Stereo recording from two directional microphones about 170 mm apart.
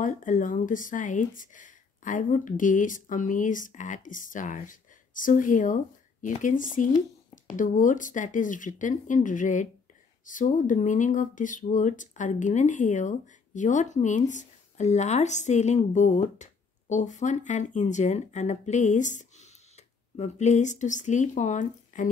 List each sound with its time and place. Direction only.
0.0 s speech: 50° left (ahead or behind)